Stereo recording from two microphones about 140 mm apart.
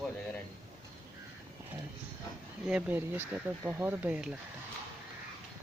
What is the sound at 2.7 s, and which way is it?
Speech, 10° right (ahead or behind).